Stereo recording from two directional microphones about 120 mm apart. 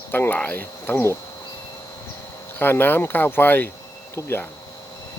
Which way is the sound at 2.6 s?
15° left (ahead or behind).